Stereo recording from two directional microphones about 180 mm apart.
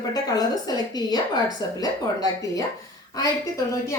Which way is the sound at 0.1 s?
20° left (ahead or behind).